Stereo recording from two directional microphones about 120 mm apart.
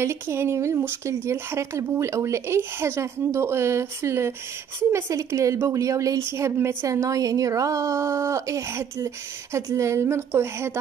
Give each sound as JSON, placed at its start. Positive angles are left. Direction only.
{"t": 0.0, "sound": "speech", "side_deg": -20}